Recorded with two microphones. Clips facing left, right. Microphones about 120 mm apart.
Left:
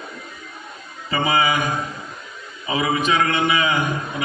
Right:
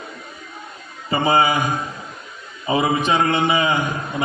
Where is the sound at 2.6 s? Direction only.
35° right (ahead or behind).